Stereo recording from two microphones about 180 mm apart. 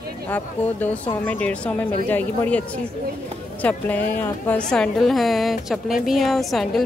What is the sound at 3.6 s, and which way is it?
A woman's voice, 10° left (ahead or behind).